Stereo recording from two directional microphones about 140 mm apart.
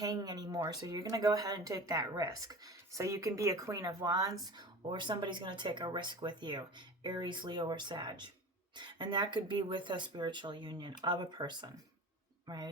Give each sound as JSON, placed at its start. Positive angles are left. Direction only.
{"t": 0.0, "sound": "speech", "side_deg": -30}